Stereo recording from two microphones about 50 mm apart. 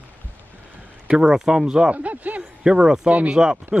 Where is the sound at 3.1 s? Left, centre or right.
Right.